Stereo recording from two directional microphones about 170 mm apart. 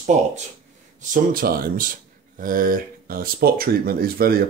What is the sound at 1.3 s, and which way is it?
Speech, 60° right (ahead or behind).